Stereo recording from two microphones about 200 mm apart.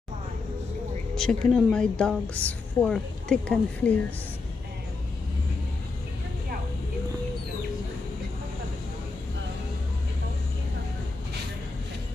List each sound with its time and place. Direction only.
1.1 s a woman's voice: 5° left (ahead or behind)